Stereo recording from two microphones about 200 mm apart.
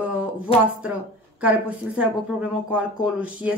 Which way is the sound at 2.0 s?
5° right (ahead or behind).